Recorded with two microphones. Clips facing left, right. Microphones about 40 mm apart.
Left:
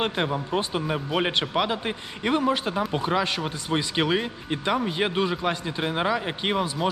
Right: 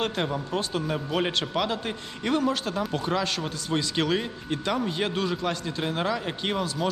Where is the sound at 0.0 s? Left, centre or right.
Centre.